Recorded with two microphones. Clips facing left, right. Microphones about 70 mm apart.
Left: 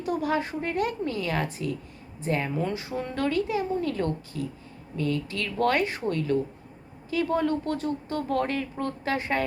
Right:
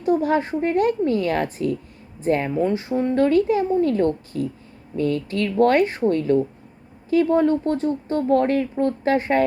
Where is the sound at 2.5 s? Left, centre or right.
Right.